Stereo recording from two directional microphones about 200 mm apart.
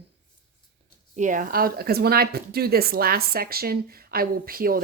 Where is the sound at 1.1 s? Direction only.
40° right (ahead or behind).